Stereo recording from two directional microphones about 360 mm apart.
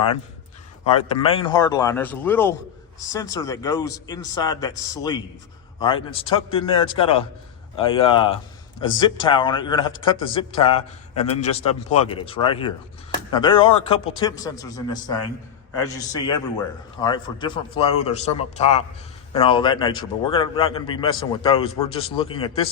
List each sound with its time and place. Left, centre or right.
0.9 s a man's voice: centre